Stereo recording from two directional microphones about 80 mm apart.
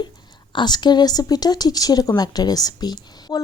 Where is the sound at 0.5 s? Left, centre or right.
Left.